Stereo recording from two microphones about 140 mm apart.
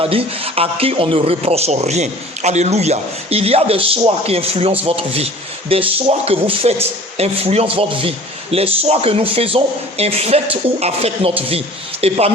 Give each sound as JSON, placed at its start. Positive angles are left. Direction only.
{"t": 0.0, "sound": "speech", "side_deg": -40}